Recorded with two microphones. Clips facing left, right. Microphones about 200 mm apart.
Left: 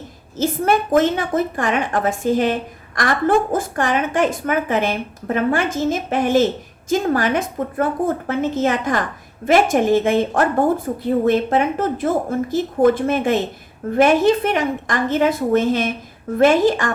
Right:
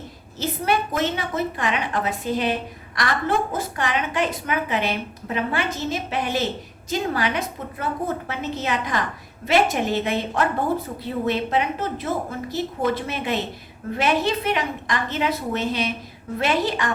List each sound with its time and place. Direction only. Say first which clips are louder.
0.3 s a woman's voice: left 5 dB; 50° left (ahead or behind)